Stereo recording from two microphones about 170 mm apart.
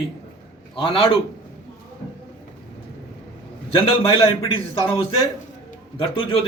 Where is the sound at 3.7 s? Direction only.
30° left (ahead or behind).